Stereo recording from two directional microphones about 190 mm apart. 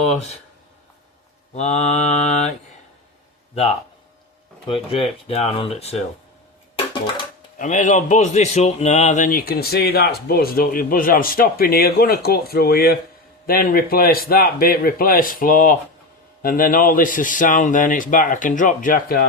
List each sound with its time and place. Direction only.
0.0 s speech: 35° left (ahead or behind)
1.5 s speech: 35° left (ahead or behind)
3.5 s a man's voice: 35° left (ahead or behind)
7.6 s a man's voice: 40° left (ahead or behind)